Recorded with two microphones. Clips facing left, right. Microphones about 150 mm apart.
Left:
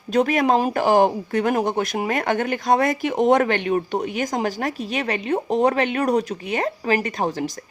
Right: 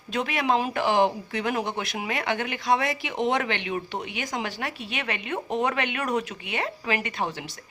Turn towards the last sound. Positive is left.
turn(degrees=40)  # may be behind; listen again after turning